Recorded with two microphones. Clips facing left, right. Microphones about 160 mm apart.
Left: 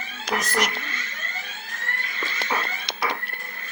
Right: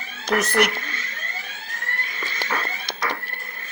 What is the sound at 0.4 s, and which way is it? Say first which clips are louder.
Speech: right 5 dB; 60° right (ahead or behind).